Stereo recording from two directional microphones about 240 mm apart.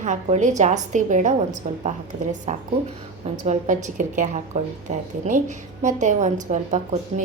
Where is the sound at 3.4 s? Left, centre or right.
Right.